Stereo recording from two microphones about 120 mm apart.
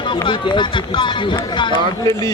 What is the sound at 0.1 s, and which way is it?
Speech, 40° left (ahead or behind).